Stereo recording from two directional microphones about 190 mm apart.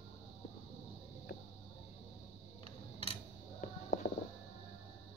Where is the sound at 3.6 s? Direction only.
50° left (ahead or behind).